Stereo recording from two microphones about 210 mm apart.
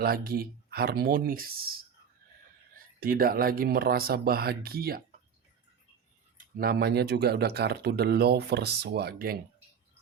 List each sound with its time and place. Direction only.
0.0 s speech: 45° right (ahead or behind)
2.7 s speech: 45° right (ahead or behind)
6.3 s speech: 45° right (ahead or behind)